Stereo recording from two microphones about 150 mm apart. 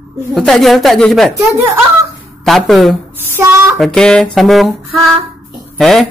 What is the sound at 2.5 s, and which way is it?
Speech, centre (ahead or behind).